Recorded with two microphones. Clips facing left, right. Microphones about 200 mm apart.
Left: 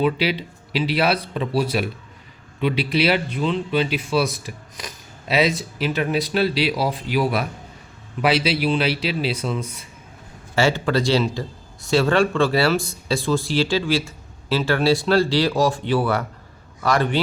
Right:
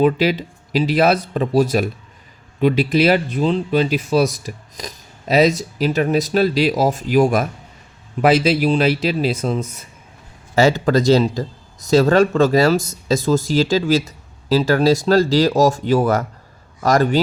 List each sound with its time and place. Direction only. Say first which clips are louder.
0.0 s speech: right 5 dB; 45° right (ahead or behind)